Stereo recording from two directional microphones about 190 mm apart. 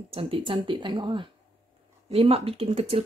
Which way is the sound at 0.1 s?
30° right (ahead or behind).